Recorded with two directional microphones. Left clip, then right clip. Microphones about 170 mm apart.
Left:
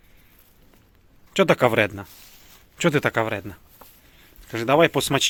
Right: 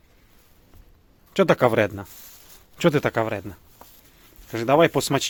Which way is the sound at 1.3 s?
10° right (ahead or behind).